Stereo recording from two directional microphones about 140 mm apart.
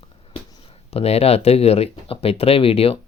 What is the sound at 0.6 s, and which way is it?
Speech, 45° left (ahead or behind).